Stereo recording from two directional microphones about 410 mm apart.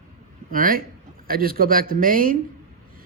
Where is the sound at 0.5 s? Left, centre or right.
Right.